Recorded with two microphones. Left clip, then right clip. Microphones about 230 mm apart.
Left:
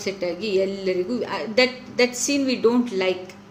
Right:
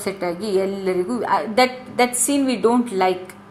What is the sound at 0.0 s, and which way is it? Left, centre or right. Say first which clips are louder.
A woman's voice: right 2 dB; centre.